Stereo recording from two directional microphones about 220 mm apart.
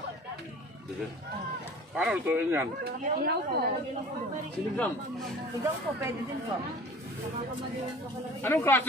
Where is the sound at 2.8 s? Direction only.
45° right (ahead or behind).